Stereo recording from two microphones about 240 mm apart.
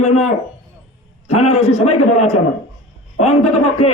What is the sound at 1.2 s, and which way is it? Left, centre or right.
Speech, left.